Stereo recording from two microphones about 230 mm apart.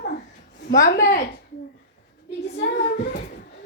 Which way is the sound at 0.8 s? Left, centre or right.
Left.